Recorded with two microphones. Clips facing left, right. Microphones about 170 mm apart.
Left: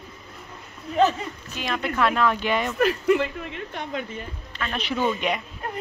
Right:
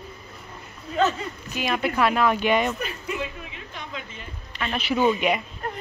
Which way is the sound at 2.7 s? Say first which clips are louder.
Left 10 dB; 75° left (ahead or behind).